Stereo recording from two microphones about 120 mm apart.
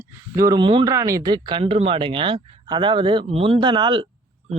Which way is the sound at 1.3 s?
40° right (ahead or behind).